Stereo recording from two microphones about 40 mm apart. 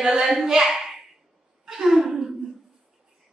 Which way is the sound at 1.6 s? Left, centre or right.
Centre.